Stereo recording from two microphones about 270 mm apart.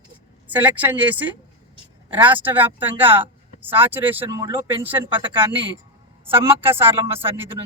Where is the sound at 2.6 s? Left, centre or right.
Centre.